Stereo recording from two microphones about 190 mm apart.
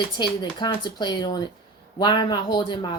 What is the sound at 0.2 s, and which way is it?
Speech, 20° left (ahead or behind).